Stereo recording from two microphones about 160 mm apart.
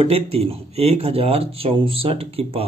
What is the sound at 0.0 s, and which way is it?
Speech, 40° right (ahead or behind).